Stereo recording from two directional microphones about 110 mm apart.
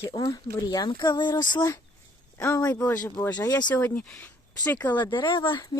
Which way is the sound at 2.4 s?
25° left (ahead or behind).